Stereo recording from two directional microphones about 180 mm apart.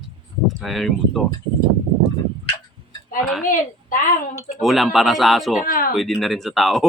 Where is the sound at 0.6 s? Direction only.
Centre (ahead or behind).